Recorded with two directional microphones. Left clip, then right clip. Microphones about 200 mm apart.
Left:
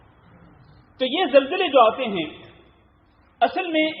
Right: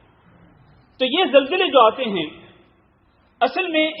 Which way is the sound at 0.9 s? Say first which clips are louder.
Right 2 dB; 35° right (ahead or behind).